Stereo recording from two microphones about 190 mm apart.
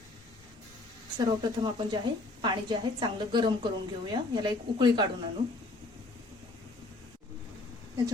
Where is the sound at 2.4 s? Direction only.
20° right (ahead or behind).